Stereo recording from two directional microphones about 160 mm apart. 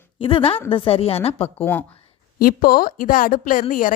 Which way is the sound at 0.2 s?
35° left (ahead or behind).